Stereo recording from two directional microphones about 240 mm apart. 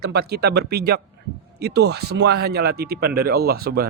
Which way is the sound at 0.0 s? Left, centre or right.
Right.